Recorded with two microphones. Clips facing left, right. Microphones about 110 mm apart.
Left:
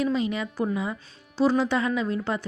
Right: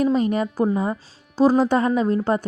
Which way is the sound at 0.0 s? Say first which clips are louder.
Right 6 dB; 45° right (ahead or behind).